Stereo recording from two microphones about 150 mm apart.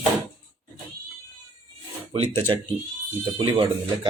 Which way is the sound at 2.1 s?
40° right (ahead or behind).